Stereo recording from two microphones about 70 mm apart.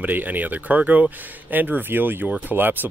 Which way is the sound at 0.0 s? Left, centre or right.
Right.